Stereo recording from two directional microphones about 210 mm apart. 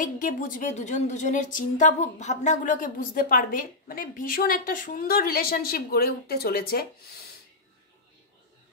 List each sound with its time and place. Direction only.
0.0 s a woman's voice: 40° left (ahead or behind)